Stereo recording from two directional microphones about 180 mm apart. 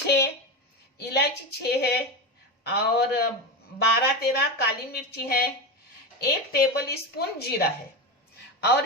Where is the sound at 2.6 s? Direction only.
65° left (ahead or behind).